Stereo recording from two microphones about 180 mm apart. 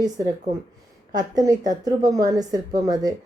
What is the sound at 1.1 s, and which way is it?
Speech, 20° right (ahead or behind).